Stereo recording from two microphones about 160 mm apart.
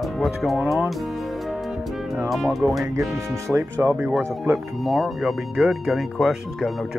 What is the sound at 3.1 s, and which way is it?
Speech, 20° right (ahead or behind).